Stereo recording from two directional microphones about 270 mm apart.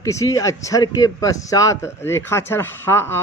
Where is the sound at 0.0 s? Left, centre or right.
Centre.